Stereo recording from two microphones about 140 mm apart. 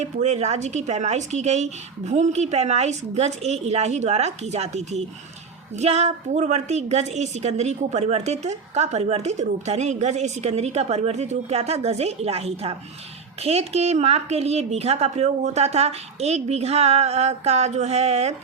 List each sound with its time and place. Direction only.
0.0 s a woman's voice: 55° right (ahead or behind)